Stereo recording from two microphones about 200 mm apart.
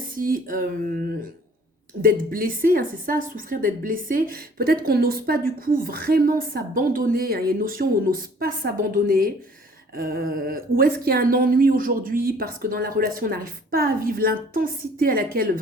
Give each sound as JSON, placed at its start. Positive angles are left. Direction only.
{"t": 0.0, "sound": "a woman's voice", "side_deg": -45}